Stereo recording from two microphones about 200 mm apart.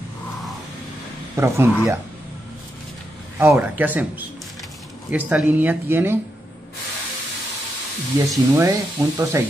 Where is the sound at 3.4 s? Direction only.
10° right (ahead or behind).